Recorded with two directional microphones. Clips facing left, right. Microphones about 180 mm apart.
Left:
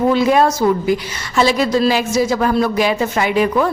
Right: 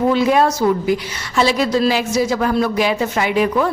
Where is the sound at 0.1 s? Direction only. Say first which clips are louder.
Left 1 dB; 45° left (ahead or behind).